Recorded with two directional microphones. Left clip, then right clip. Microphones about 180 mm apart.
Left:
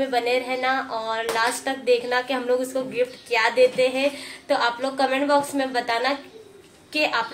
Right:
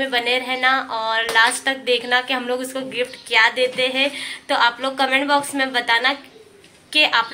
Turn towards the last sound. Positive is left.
turn(degrees=0)  # may be behind; listen again after turning